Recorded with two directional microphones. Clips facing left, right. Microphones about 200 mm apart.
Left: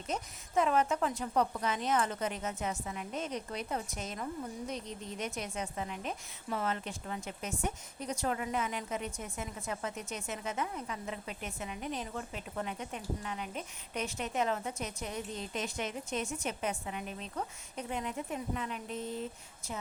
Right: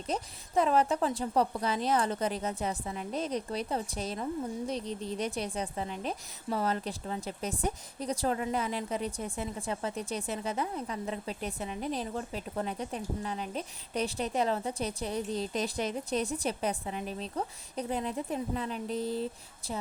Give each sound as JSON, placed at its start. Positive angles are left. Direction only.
{"t": 0.1, "sound": "a woman's voice", "side_deg": -35}